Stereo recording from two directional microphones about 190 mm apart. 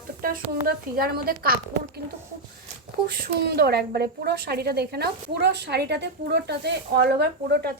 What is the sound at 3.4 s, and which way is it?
A woman's voice, 60° right (ahead or behind).